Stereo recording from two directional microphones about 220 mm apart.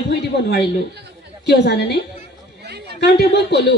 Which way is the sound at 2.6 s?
50° right (ahead or behind).